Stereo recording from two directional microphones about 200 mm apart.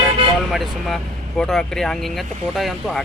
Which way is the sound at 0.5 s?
Centre (ahead or behind).